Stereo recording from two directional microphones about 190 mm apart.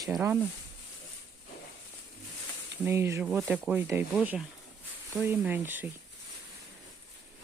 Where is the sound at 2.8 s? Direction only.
15° right (ahead or behind).